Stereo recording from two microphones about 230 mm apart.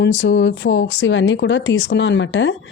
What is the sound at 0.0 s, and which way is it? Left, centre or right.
Speech, left.